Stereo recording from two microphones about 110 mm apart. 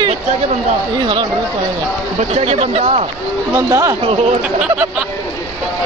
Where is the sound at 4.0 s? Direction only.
60° right (ahead or behind).